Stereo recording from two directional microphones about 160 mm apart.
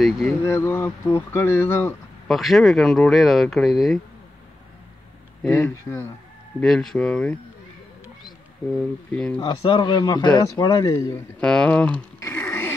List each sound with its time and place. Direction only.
0.0 s speech: centre (ahead or behind)
0.5 s speech: 15° left (ahead or behind)
2.2 s speech: centre (ahead or behind)
5.6 s speech: 15° left (ahead or behind)
6.6 s speech: centre (ahead or behind)
8.6 s speech: 5° left (ahead or behind)
9.4 s speech: 30° left (ahead or behind)
11.3 s speech: 5° left (ahead or behind)
12.2 s music: 15° left (ahead or behind)